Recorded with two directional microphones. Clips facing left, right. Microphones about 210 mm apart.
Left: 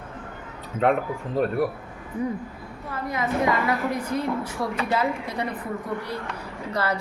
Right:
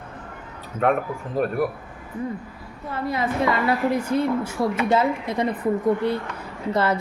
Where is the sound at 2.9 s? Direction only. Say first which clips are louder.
Right 2 dB; 30° right (ahead or behind).